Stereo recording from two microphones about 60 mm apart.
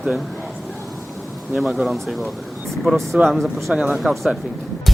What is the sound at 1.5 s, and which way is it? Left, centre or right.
Speech, centre.